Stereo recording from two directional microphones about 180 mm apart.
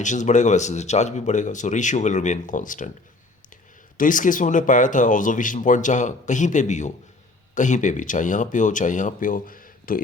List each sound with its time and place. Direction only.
0.0 s speech: 45° left (ahead or behind)
3.9 s speech: 45° left (ahead or behind)